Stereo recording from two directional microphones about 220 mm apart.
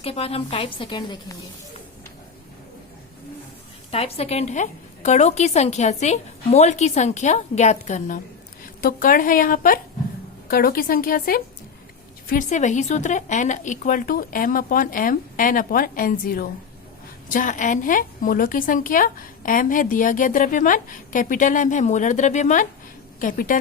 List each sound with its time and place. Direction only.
0.0 s a woman's voice: 25° left (ahead or behind)
3.9 s a woman's voice: 30° left (ahead or behind)